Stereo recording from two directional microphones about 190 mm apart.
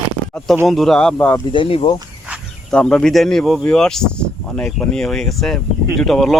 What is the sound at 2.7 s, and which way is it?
Speech, 5° left (ahead or behind).